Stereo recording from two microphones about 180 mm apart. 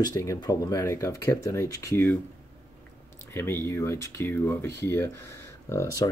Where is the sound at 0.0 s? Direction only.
20° left (ahead or behind).